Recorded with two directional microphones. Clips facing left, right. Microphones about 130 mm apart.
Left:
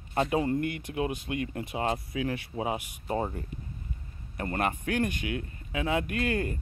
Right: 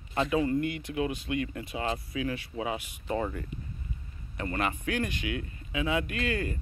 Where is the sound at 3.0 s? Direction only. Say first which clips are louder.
Even; 30° left (ahead or behind).